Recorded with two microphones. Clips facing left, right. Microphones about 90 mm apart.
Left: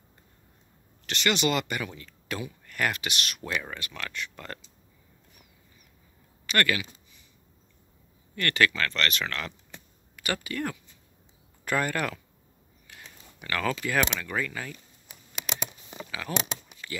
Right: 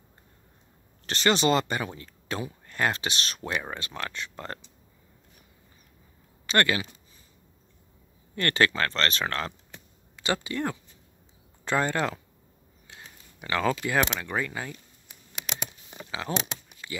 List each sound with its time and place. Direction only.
1.0 s speech: 35° right (ahead or behind)
6.4 s speech: 30° right (ahead or behind)
8.4 s speech: 30° right (ahead or behind)
16.1 s speech: 25° right (ahead or behind)